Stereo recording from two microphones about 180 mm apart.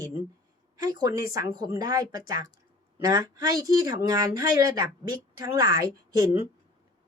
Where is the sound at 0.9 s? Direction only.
20° right (ahead or behind).